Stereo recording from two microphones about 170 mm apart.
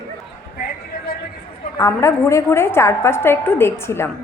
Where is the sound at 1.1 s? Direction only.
60° left (ahead or behind).